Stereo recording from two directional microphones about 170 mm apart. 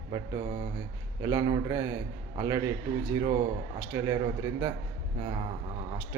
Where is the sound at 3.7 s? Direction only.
20° right (ahead or behind).